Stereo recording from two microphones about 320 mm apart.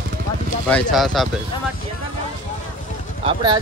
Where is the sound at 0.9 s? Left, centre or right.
Centre.